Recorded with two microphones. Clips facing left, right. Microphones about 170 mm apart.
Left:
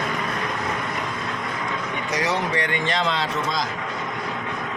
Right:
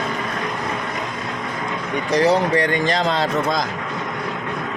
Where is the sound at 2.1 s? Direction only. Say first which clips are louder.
Right 8 dB; 35° right (ahead or behind).